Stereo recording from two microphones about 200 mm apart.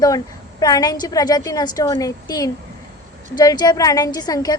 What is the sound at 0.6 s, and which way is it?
A woman's voice, 20° left (ahead or behind).